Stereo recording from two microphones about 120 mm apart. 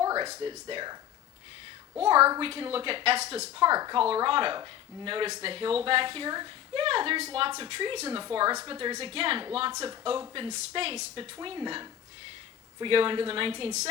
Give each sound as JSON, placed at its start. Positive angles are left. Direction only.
{"t": 0.0, "sound": "a sound", "side_deg": -30}
{"t": 0.4, "sound": "speech", "side_deg": -40}
{"t": 2.1, "sound": "a woman's voice", "side_deg": -20}
{"t": 2.4, "sound": "a woman's voice", "side_deg": -50}
{"t": 3.6, "sound": "speech", "side_deg": -35}
{"t": 4.1, "sound": "a woman's voice", "side_deg": -45}
{"t": 6.8, "sound": "a woman's voice", "side_deg": -50}
{"t": 10.8, "sound": "a woman's voice", "side_deg": -60}
{"t": 11.1, "sound": "a woman's voice", "side_deg": -35}